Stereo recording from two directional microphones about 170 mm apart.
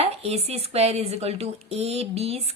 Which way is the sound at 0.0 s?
35° right (ahead or behind).